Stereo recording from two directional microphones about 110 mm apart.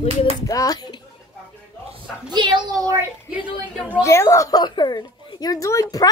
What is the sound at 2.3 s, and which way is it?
Speech, 45° right (ahead or behind).